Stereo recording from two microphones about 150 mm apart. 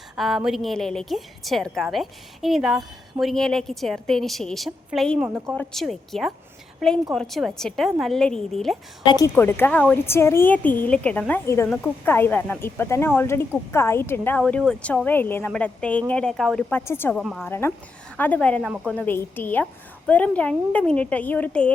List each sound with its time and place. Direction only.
0.2 s a woman's voice: centre (ahead or behind)
9.0 s a woman's voice: 25° left (ahead or behind)
9.3 s a woman's voice: 15° left (ahead or behind)
17.2 s a woman's voice: 5° left (ahead or behind)
17.4 s a woman's voice: 15° left (ahead or behind)